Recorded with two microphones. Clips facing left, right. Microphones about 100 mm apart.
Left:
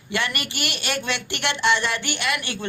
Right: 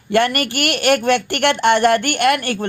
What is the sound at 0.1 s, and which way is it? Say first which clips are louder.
Speech: right 10 dB; 50° right (ahead or behind).